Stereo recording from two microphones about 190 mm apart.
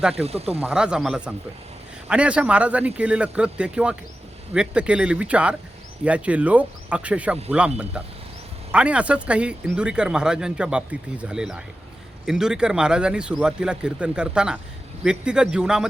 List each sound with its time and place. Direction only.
0.1 s speech: 30° right (ahead or behind)
0.6 s speech: 5° right (ahead or behind)